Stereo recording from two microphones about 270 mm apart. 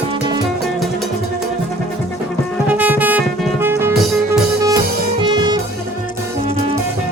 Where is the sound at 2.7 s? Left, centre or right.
Centre.